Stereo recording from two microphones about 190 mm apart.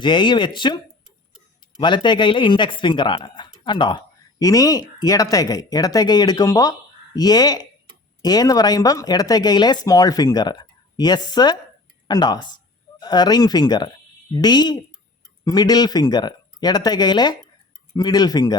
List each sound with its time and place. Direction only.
0.0 s speech: 25° left (ahead or behind)
1.8 s speech: 25° left (ahead or behind)